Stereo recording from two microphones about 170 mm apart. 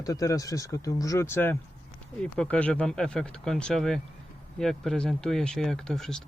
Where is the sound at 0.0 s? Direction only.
20° left (ahead or behind).